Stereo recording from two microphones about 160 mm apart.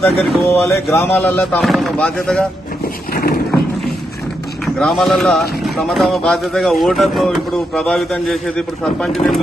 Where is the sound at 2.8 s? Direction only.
70° left (ahead or behind).